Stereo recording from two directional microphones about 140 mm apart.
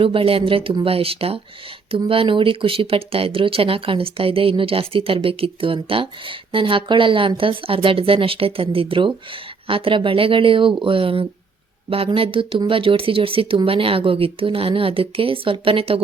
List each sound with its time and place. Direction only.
0.0 s speech: 40° right (ahead or behind)